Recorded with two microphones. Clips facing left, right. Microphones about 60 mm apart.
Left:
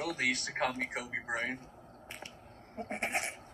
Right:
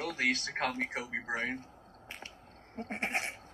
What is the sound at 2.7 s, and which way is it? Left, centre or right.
Speech, right.